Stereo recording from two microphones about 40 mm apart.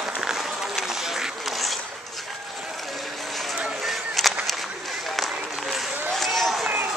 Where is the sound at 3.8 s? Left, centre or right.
Centre.